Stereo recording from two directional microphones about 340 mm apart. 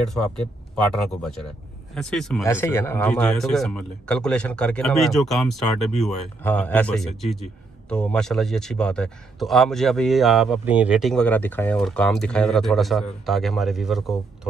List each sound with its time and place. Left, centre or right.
2.0 s a man's voice: centre